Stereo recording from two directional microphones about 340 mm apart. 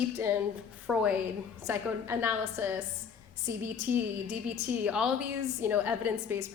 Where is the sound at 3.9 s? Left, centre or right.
Right.